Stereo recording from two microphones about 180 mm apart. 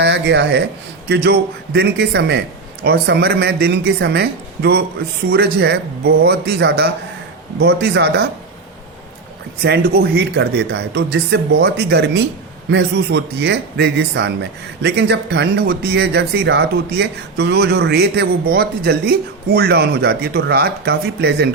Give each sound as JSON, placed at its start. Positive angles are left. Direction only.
{"t": 0.0, "sound": "speech", "side_deg": -70}
{"t": 9.6, "sound": "speech", "side_deg": -65}